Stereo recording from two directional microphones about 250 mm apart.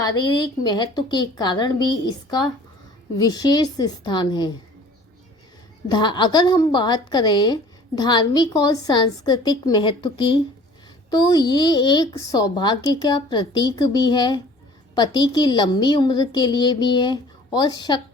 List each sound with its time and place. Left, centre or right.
0.0 s a woman's voice: centre
5.9 s a woman's voice: centre